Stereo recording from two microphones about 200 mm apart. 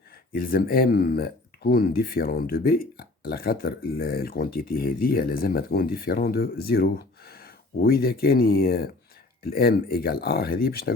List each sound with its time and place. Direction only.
0.3 s speech: 45° left (ahead or behind)